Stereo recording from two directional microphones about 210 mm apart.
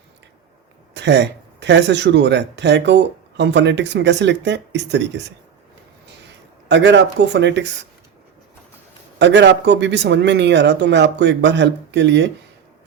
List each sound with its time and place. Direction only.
0.9 s speech: 55° right (ahead or behind)
6.7 s speech: 60° right (ahead or behind)
9.1 s speech: 55° right (ahead or behind)